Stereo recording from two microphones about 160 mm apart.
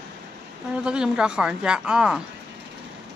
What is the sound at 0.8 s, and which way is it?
Speech, 5° right (ahead or behind).